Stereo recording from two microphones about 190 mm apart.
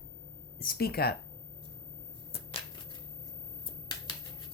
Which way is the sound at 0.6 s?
55° left (ahead or behind).